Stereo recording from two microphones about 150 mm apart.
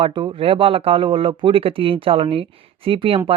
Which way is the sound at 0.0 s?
35° right (ahead or behind).